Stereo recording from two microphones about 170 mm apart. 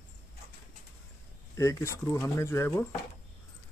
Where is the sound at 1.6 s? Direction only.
20° left (ahead or behind).